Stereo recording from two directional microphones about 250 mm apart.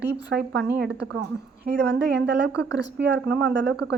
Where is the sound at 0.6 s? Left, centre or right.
Right.